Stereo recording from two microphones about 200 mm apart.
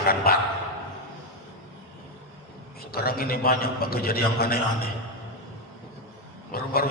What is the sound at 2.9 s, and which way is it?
A man's voice, 50° left (ahead or behind).